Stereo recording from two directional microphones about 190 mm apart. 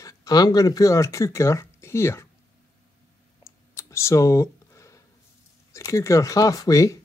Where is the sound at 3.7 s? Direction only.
15° left (ahead or behind).